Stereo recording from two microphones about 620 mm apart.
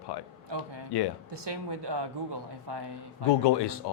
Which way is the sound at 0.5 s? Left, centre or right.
Right.